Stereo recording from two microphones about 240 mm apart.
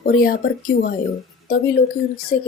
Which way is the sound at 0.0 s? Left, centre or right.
Left.